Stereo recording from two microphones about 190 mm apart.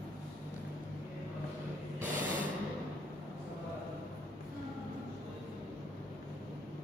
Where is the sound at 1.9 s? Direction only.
40° right (ahead or behind).